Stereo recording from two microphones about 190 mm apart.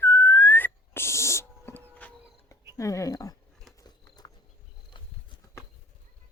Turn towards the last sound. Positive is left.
turn(degrees=25)  # may be behind; listen again after turning